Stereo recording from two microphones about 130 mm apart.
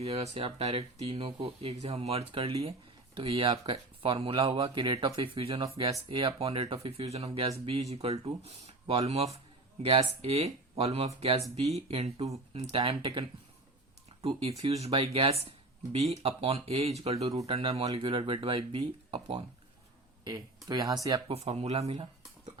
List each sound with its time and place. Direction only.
0.0 s speech: 55° right (ahead or behind)
20.2 s speech: 30° right (ahead or behind)
21.2 s speech: 55° right (ahead or behind)